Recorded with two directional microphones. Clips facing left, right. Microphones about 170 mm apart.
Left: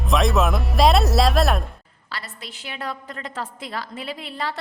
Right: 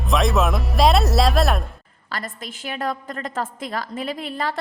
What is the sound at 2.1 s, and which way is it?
A woman's voice, 45° right (ahead or behind).